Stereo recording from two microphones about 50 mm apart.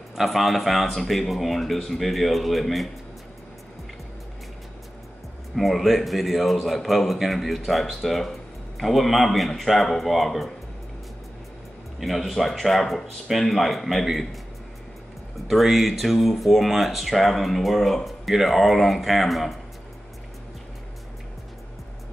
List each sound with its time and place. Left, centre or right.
0.1 s a man's voice: centre
5.6 s a man's voice: centre
12.0 s a man's voice: centre
15.4 s a man's voice: centre